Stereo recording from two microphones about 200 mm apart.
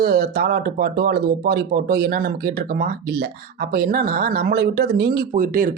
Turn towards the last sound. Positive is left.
turn(degrees=-45)  # may be behind; listen again after turning